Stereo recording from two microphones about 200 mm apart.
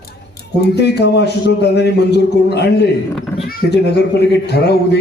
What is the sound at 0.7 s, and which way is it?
A man's voice, 55° left (ahead or behind).